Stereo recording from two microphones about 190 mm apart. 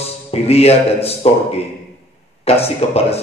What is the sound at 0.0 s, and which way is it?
A man's voice, 30° left (ahead or behind).